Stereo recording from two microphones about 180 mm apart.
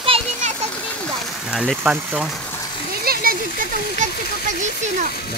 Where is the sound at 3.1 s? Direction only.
55° right (ahead or behind).